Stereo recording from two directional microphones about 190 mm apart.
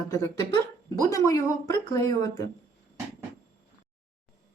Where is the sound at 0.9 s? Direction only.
15° left (ahead or behind).